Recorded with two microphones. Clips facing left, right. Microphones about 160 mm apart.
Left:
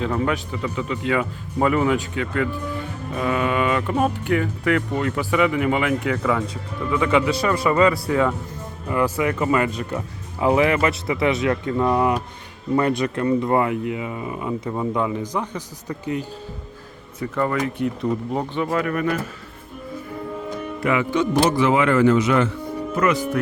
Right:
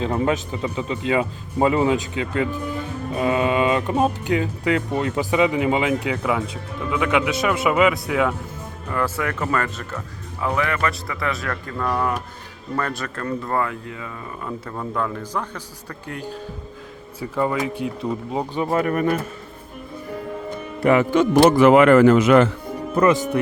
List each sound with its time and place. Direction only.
0.0 s speech: 25° right (ahead or behind)
6.1 s speech: 10° right (ahead or behind)
8.9 s speech: 10° left (ahead or behind)
10.4 s speech: 25° left (ahead or behind); by 16.2 s 10° left (ahead or behind)
17.2 s speech: 10° right (ahead or behind)
18.5 s speech: 30° right (ahead or behind)
20.8 s speech: 45° right (ahead or behind); by 22.4 s 65° right (ahead or behind)
23.0 s speech: 25° right (ahead or behind)